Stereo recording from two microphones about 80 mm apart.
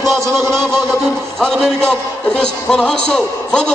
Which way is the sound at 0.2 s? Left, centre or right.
Right.